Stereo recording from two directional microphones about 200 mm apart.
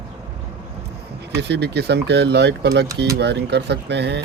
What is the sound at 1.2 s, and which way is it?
Speech, 55° right (ahead or behind).